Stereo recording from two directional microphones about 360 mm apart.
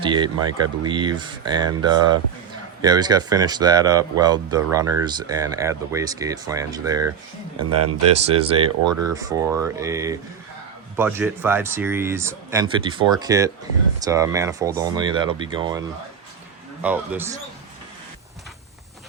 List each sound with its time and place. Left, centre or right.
0.0 s speech: centre
8.0 s speech: centre
8.9 s speech: right
9.1 s speech: centre
16.8 s a man's voice: centre